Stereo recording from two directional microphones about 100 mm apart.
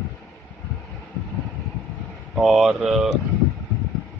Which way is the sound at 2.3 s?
5° right (ahead or behind).